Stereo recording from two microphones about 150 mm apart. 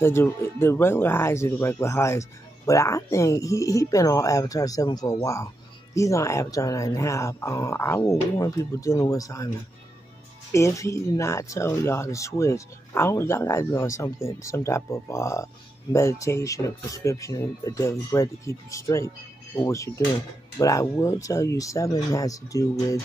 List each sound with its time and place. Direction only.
0.0 s speech: 15° left (ahead or behind)
10.5 s speech: 20° left (ahead or behind)